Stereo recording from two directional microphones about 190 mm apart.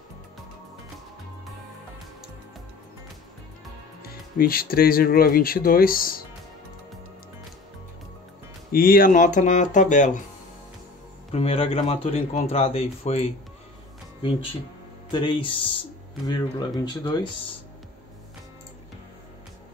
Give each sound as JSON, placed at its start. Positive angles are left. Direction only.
{"t": 4.0, "sound": "speech", "side_deg": 50}
{"t": 8.7, "sound": "speech", "side_deg": 50}
{"t": 11.3, "sound": "speech", "side_deg": 30}
{"t": 15.0, "sound": "speech", "side_deg": 25}